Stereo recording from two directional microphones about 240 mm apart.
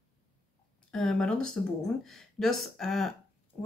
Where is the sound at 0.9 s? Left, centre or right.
Centre.